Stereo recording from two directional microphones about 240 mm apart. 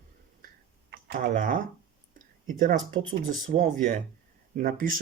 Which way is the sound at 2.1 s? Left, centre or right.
Right.